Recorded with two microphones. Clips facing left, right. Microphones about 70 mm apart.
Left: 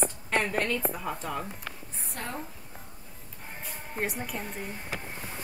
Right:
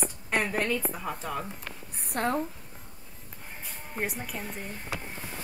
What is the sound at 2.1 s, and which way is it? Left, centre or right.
Speech, right.